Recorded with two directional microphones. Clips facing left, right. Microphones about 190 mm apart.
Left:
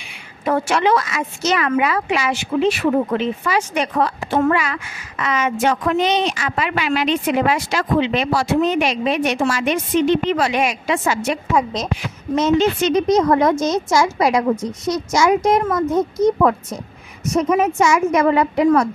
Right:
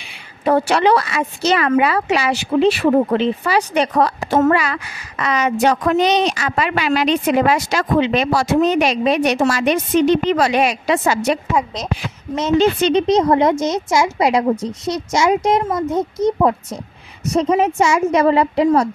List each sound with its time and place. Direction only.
0.5 s a woman's voice: 35° right (ahead or behind)